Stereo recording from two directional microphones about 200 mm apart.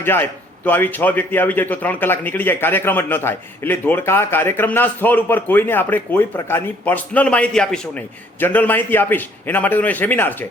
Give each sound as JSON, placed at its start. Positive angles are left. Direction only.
{"t": 0.0, "sound": "a man's voice", "side_deg": 10}